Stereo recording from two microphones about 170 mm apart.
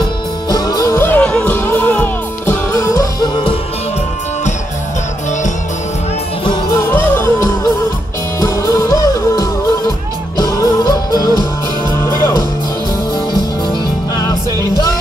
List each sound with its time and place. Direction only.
0.0 s music: 25° left (ahead or behind)
6.9 s music: 15° left (ahead or behind)